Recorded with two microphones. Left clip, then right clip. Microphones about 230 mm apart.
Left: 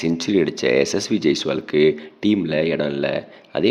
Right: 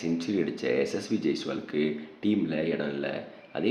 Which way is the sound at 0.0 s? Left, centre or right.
Left.